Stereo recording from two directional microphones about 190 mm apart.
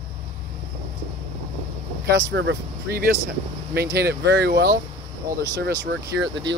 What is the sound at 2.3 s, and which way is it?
Speech, 70° right (ahead or behind).